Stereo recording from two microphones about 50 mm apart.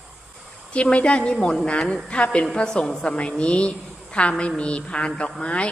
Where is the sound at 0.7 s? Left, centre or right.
Left.